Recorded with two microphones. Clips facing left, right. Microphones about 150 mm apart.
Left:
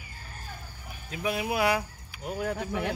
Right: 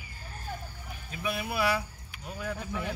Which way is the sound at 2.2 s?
55° left (ahead or behind).